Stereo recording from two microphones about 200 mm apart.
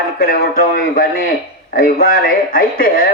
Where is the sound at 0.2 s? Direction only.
45° left (ahead or behind).